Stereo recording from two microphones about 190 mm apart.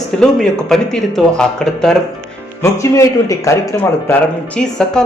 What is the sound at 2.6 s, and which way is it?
A man's voice, 15° left (ahead or behind).